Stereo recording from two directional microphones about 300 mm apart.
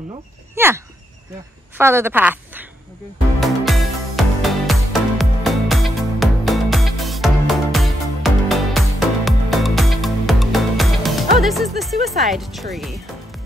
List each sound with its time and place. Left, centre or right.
0.6 s speech: centre
3.3 s music: centre
11.8 s speech: centre